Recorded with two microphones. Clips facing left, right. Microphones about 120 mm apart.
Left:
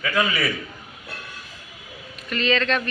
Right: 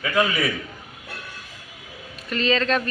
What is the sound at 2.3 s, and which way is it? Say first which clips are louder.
Speech: right 1 dB; 35° right (ahead or behind).